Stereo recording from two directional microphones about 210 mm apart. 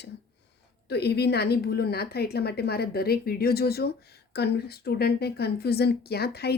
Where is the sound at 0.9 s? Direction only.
50° left (ahead or behind).